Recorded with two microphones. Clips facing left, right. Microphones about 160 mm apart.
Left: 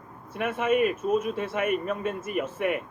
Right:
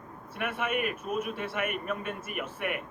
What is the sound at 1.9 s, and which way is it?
Speech, 35° left (ahead or behind).